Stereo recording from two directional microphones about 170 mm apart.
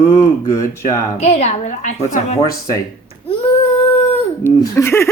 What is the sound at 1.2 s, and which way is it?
A woman's voice, 40° left (ahead or behind).